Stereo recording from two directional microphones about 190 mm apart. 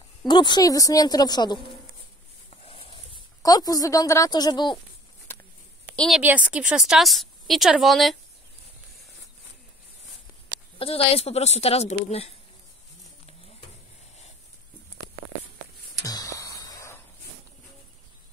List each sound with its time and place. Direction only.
0.3 s a woman's voice: 25° left (ahead or behind)
2.5 s a sound: 30° left (ahead or behind)
3.4 s a woman's voice: 20° left (ahead or behind)
5.9 s a woman's voice: centre (ahead or behind)
10.8 s speech: 30° left (ahead or behind)
16.0 s a sound: 20° left (ahead or behind)